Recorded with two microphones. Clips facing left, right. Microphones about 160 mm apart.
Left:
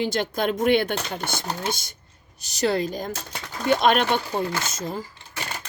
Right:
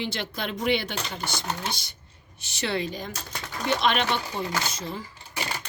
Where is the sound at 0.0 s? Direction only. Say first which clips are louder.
Left 7 dB; 45° left (ahead or behind).